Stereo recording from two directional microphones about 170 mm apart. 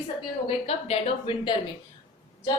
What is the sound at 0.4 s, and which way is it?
A woman's voice, 35° left (ahead or behind).